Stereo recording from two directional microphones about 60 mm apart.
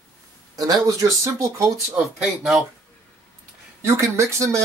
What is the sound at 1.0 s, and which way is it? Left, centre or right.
Speech, right.